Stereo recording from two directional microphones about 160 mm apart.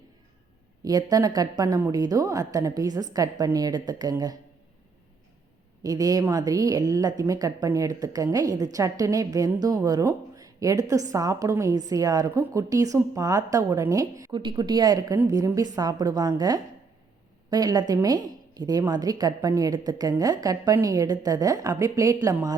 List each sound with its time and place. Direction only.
1.1 s a woman's voice: 25° right (ahead or behind)
5.8 s a woman's voice: 20° right (ahead or behind)